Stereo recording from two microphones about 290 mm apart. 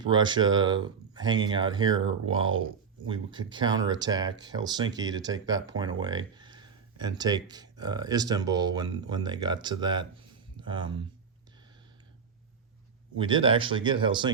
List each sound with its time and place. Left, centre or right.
0.0 s speech: centre
13.1 s speech: centre